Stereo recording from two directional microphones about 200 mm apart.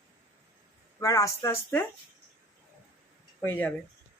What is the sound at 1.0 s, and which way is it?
Speech, 15° left (ahead or behind).